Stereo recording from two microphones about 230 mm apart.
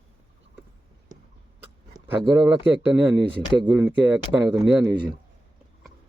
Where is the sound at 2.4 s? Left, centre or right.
Centre.